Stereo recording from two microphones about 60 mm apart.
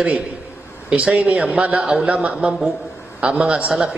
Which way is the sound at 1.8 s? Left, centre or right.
Centre.